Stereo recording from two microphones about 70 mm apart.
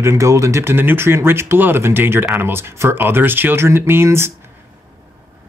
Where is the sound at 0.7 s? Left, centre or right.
Right.